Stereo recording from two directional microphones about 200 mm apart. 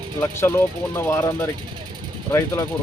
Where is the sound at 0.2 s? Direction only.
10° left (ahead or behind).